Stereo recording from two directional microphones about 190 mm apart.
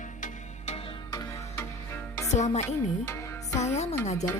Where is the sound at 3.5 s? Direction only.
35° left (ahead or behind).